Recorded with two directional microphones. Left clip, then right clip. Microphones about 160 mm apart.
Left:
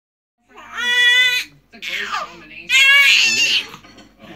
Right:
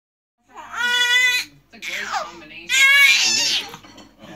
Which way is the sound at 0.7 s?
20° right (ahead or behind).